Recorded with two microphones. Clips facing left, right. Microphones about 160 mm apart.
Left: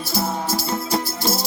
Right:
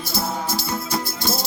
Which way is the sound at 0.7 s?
25° left (ahead or behind).